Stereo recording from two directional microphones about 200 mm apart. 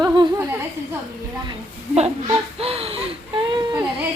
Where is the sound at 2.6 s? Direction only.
30° right (ahead or behind).